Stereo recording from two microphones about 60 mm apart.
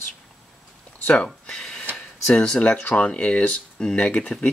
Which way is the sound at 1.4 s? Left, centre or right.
Centre.